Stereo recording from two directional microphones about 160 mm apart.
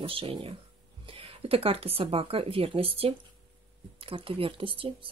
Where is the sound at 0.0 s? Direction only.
35° right (ahead or behind).